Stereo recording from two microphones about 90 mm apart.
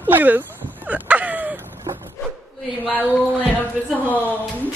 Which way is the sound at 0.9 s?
20° right (ahead or behind).